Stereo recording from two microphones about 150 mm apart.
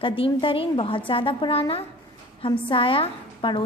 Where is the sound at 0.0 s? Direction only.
35° left (ahead or behind).